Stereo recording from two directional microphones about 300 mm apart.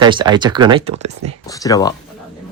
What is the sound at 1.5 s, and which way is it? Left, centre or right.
Speech, centre.